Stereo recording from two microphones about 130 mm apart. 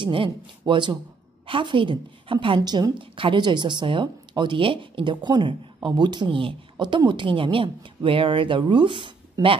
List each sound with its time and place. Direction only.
0.0 s a woman's voice: 40° right (ahead or behind)